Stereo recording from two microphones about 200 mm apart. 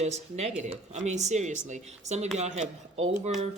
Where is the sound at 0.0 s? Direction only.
35° right (ahead or behind).